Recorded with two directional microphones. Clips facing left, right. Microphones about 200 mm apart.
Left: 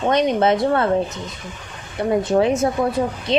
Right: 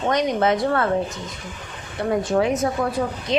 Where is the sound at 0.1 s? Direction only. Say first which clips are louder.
Left 3 dB; 25° left (ahead or behind).